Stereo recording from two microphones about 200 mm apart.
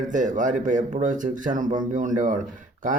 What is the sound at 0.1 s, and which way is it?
A man's voice, 40° right (ahead or behind).